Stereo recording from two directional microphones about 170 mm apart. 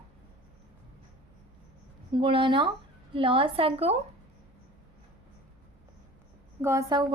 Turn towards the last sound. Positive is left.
turn(degrees=-20)  # may be behind; listen again after turning